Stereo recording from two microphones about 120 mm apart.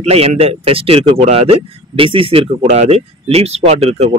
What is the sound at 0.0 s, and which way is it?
A man's voice, 60° right (ahead or behind).